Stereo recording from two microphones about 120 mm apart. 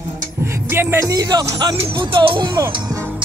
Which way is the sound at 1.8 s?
45° right (ahead or behind).